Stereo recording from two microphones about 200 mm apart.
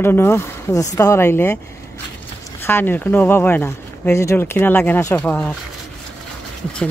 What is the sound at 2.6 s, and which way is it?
Speech, 10° left (ahead or behind).